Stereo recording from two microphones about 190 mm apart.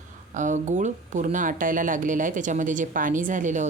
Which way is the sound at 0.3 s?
40° right (ahead or behind).